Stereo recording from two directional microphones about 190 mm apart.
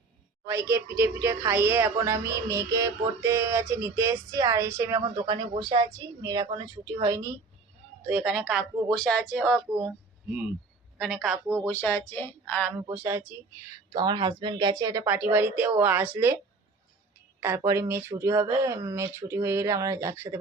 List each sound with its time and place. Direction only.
0.4 s a woman's voice: 15° right (ahead or behind)
8.0 s speech: 5° right (ahead or behind)
10.9 s speech: centre (ahead or behind)
11.4 s a woman's voice: 15° right (ahead or behind)
11.7 s a woman's voice: 10° left (ahead or behind)
12.9 s a woman's voice: 10° right (ahead or behind)
13.9 s a woman's voice: 25° right (ahead or behind)
17.4 s a woman's voice: 15° right (ahead or behind)